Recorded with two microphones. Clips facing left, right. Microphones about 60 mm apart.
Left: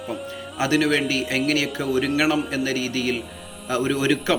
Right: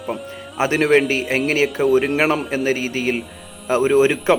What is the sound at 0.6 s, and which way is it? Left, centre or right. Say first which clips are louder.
A man's voice: right 5 dB; right.